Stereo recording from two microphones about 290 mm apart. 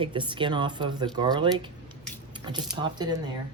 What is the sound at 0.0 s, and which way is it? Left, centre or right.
Speech, centre.